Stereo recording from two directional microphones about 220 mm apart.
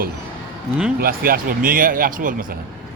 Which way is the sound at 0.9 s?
40° right (ahead or behind).